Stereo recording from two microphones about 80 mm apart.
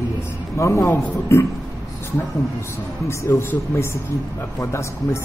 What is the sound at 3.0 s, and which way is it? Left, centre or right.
Speech, left.